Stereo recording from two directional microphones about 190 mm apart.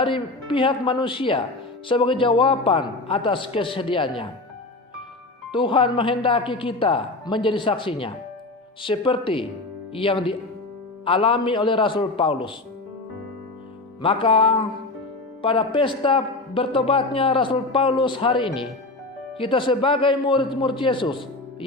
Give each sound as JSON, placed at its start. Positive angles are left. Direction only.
{"t": 0.0, "sound": "a man's voice", "side_deg": 25}
{"t": 5.5, "sound": "a man's voice", "side_deg": 25}
{"t": 14.0, "sound": "a man's voice", "side_deg": 30}